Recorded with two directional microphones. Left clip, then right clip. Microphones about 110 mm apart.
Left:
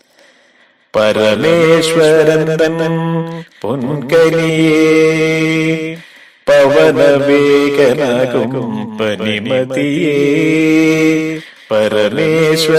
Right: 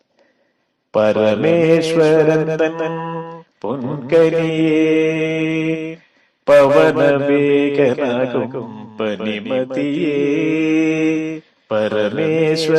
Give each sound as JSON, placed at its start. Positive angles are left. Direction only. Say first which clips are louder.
{"t": 0.9, "sound": "mantra", "louder": "left 3 dB", "side_deg": 40}
{"t": 6.4, "sound": "a sound", "louder": "left 2 dB", "side_deg": 30}
{"t": 6.7, "sound": "mantra", "louder": "left 4 dB", "side_deg": 35}